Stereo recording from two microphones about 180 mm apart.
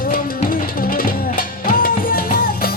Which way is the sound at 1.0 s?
55° left (ahead or behind).